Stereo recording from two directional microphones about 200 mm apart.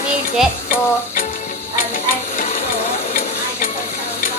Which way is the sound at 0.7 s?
40° left (ahead or behind).